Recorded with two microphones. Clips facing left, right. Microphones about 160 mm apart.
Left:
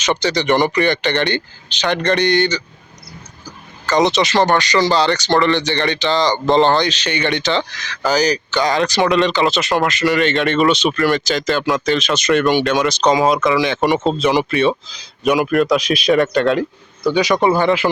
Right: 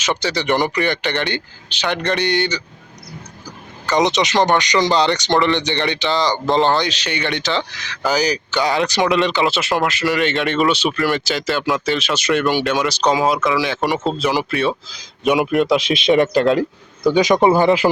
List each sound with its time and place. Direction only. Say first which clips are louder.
0.0 s speech: left 3 dB; 5° right (ahead or behind)
3.8 s speech: left 2 dB; 15° right (ahead or behind)
15.4 s speech: left 1 dB; 20° right (ahead or behind)
17.3 s speech: right 1 dB; 15° right (ahead or behind)